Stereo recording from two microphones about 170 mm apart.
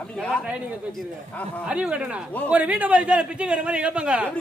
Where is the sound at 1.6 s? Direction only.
5° right (ahead or behind).